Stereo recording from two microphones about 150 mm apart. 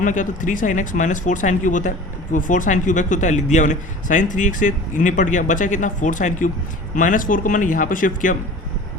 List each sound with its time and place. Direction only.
0.0 s speech: 60° left (ahead or behind)